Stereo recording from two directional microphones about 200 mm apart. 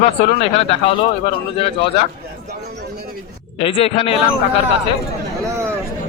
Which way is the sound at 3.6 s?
30° left (ahead or behind).